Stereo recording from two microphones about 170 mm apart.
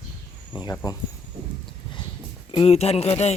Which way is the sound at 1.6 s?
25° left (ahead or behind).